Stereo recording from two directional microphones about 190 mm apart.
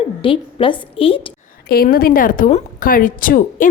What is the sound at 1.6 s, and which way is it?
A woman's voice, 55° left (ahead or behind).